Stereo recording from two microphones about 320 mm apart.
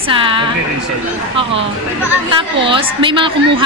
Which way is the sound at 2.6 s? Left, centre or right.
Centre.